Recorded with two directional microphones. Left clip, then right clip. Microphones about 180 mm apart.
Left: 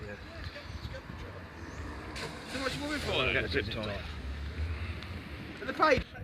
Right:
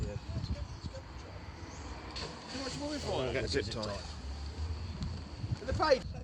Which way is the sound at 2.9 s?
40° right (ahead or behind).